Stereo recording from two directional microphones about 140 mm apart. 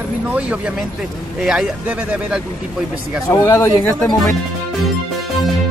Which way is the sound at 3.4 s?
20° left (ahead or behind).